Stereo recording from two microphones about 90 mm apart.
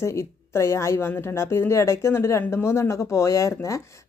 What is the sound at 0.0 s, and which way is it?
A woman's voice, 30° left (ahead or behind).